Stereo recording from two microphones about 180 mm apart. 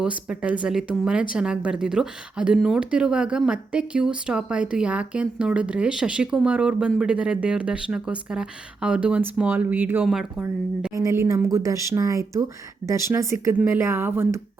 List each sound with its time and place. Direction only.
0.0 s a woman's voice: 5° right (ahead or behind)
10.9 s speech: 15° right (ahead or behind)